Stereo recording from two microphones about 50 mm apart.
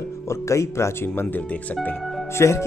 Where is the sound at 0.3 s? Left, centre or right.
Left.